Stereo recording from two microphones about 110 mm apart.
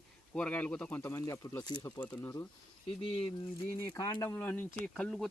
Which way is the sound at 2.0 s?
20° left (ahead or behind).